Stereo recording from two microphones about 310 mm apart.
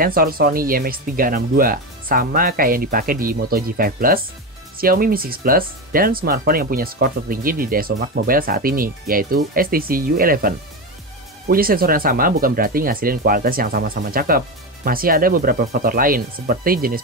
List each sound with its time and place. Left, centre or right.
0.0 s speech: right